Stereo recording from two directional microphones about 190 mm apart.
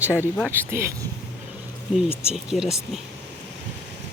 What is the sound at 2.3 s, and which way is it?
Speech, 5° right (ahead or behind).